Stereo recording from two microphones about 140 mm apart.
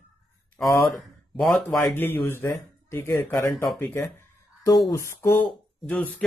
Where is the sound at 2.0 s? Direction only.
15° left (ahead or behind).